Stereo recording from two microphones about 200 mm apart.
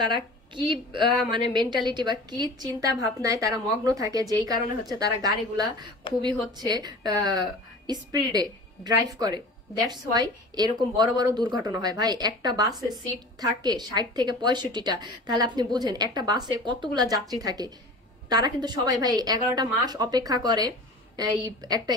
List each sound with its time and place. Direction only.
0.0 s a woman's voice: 25° right (ahead or behind)